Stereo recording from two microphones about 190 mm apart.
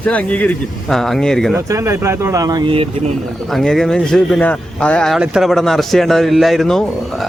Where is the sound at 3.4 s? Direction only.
Centre (ahead or behind).